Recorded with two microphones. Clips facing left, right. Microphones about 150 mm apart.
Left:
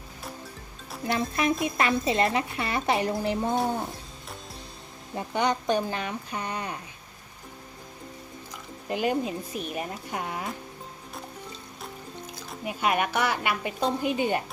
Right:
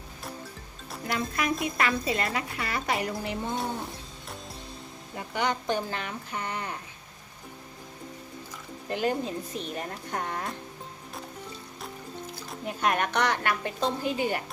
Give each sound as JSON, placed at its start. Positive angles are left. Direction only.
{"t": 1.0, "sound": "speech", "side_deg": 25}
{"t": 5.1, "sound": "a woman's voice", "side_deg": 20}
{"t": 8.9, "sound": "a woman's voice", "side_deg": 15}
{"t": 12.5, "sound": "a woman's voice", "side_deg": 5}